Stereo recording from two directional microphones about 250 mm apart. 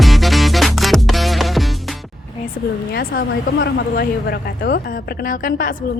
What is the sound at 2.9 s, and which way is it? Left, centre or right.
A woman's voice, left.